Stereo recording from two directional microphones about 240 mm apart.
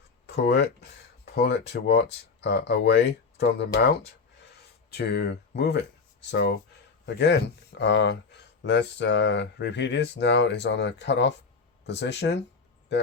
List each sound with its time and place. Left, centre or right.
0.3 s speech: left
7.0 s speech: left